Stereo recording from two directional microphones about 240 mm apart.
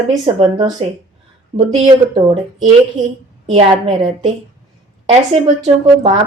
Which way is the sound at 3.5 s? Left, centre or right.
Right.